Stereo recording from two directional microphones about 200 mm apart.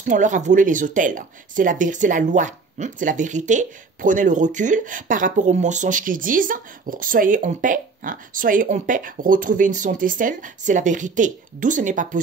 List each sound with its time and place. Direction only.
0.0 s speech: 40° right (ahead or behind)